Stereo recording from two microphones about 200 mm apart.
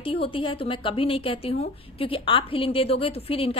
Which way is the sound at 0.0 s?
30° left (ahead or behind).